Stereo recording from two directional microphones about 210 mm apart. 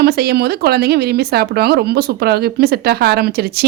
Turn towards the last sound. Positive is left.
turn(degrees=-50)  # may be behind; listen again after turning